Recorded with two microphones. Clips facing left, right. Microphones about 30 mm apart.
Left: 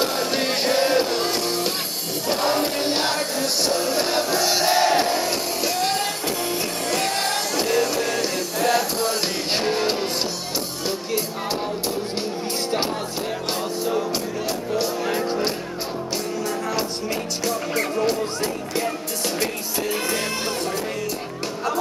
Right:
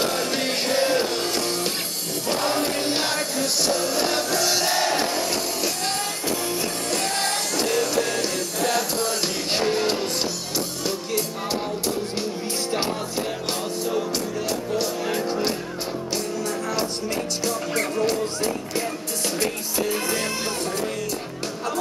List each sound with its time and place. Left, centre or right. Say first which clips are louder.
0.0 s music: left 1 dB; centre
17.5 s music: left 3 dB; centre